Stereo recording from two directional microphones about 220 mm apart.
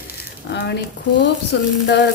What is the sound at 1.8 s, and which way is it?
Speech, 50° left (ahead or behind).